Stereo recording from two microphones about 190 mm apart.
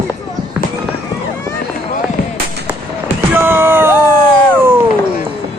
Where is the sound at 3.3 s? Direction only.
10° right (ahead or behind).